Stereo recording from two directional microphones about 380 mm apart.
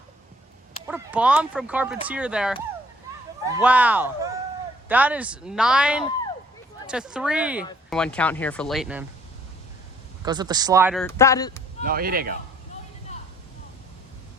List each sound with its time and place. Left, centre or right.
0.9 s speech: centre
10.2 s speech: centre
11.0 s speech: centre
11.9 s speech: right